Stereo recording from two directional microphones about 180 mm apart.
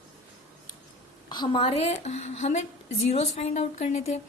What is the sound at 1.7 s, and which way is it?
A woman's voice, 35° left (ahead or behind).